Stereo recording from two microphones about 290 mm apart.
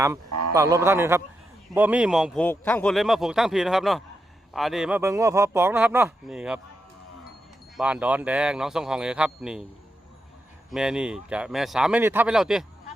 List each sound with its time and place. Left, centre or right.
0.3 s a sound: right
0.5 s a man's voice: centre
7.8 s a man's voice: centre
10.7 s a man's voice: centre